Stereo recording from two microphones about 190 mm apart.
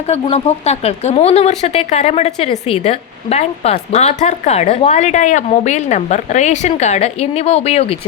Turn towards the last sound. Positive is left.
turn(degrees=35)  # may be behind; listen again after turning